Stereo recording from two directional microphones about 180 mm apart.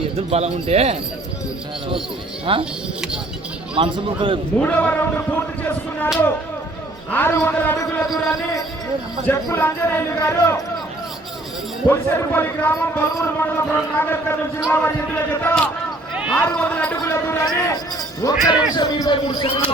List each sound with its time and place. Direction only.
0.3 s speech: 35° right (ahead or behind)
2.5 s speech: 30° right (ahead or behind)
3.8 s speech: 30° right (ahead or behind)
4.5 s a man's voice: 10° left (ahead or behind)
7.1 s a man's voice: 10° left (ahead or behind)
11.9 s a man's voice: 10° left (ahead or behind)